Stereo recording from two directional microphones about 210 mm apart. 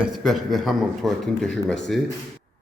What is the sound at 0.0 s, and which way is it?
A man's voice, centre (ahead or behind).